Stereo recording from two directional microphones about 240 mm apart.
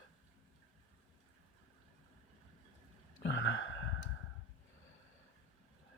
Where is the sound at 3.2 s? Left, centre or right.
Left.